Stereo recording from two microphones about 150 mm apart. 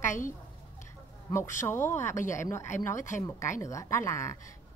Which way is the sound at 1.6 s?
15° left (ahead or behind).